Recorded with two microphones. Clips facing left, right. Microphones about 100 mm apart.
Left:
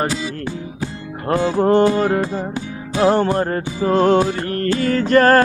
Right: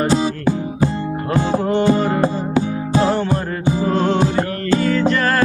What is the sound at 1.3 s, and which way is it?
Music, 40° left (ahead or behind).